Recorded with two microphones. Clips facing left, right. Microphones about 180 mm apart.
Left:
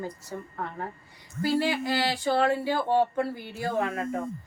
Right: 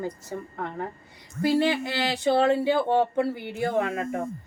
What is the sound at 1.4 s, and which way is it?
A woman's voice, 20° right (ahead or behind).